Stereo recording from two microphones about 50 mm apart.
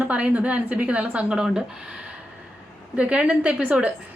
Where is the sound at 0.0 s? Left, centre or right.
Right.